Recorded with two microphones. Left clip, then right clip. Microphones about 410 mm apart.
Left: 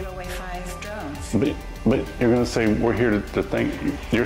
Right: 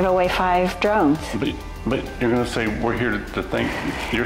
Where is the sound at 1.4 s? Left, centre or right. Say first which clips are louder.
Left 2 dB; left.